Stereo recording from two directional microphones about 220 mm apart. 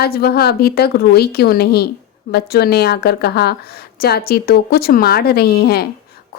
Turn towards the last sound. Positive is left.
turn(degrees=45)  # may be behind; listen again after turning